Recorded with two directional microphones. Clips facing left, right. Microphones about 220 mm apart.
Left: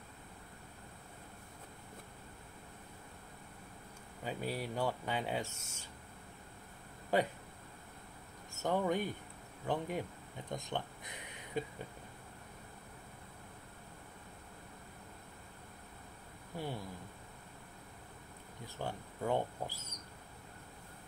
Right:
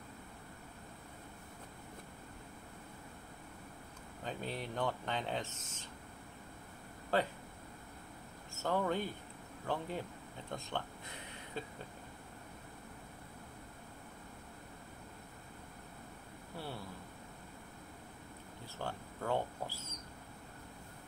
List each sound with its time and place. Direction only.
4.2 s speech: 10° left (ahead or behind)
7.1 s speech: 15° left (ahead or behind)
8.6 s speech: 15° left (ahead or behind)
10.5 s a sound: 15° left (ahead or behind)
16.5 s speech: 15° left (ahead or behind)
18.8 s speech: 15° left (ahead or behind)